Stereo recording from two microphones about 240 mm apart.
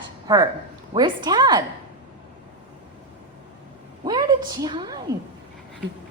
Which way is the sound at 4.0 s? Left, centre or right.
Centre.